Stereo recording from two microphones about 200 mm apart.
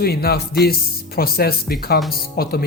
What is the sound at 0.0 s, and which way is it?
Speech, 50° left (ahead or behind).